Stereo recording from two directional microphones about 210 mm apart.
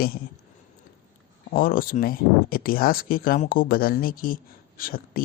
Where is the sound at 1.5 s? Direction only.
45° left (ahead or behind).